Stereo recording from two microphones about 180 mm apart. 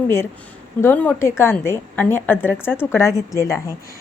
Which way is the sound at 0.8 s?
10° left (ahead or behind).